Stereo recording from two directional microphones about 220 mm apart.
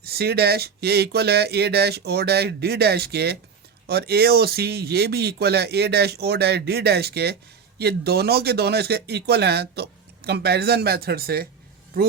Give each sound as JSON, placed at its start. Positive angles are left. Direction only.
{"t": 0.0, "sound": "speech", "side_deg": -45}